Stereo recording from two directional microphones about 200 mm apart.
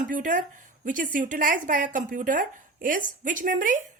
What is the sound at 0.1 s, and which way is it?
A woman's voice, 40° right (ahead or behind).